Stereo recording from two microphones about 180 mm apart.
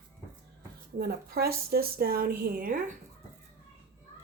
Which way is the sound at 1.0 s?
60° right (ahead or behind).